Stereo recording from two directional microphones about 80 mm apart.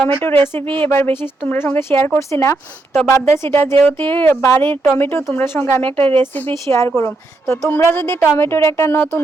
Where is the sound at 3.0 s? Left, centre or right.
Left.